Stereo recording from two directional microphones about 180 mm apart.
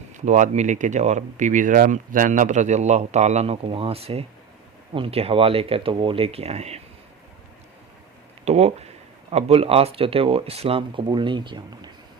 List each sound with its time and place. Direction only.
0.1 s speech: 45° right (ahead or behind)
8.4 s speech: 35° right (ahead or behind)